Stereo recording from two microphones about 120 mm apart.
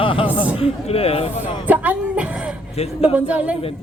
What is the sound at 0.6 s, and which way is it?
Speech, 55° left (ahead or behind).